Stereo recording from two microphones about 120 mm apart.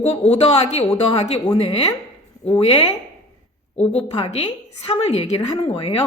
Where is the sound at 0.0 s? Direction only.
60° left (ahead or behind).